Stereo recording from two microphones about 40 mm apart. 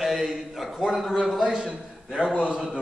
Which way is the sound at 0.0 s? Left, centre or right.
Centre.